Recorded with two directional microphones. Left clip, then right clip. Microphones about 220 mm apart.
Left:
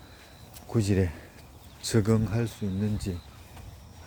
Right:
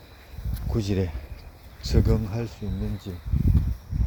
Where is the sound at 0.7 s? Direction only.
10° left (ahead or behind).